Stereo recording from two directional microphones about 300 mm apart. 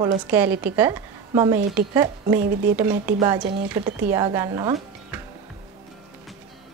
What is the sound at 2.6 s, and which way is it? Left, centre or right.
A woman's voice, centre.